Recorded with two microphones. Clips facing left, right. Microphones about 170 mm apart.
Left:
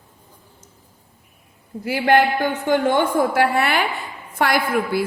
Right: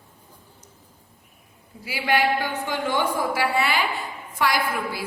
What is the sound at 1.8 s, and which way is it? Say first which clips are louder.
A woman's voice: left 6 dB; 50° left (ahead or behind).